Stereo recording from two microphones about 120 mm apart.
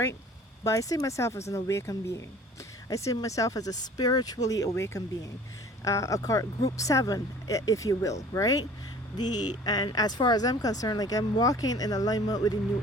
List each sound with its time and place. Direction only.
0.6 s speech: 25° left (ahead or behind)